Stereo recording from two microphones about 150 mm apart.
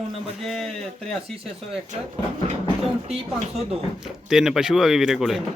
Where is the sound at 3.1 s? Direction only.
45° right (ahead or behind).